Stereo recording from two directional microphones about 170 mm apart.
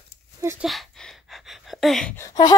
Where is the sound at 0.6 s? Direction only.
Centre (ahead or behind).